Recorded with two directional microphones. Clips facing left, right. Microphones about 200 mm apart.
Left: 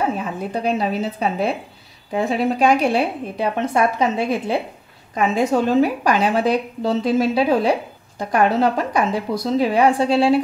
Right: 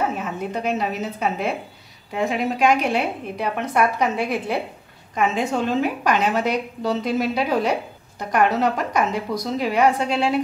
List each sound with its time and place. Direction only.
0.2 s a woman's voice: 35° left (ahead or behind)
5.1 s a woman's voice: 40° left (ahead or behind)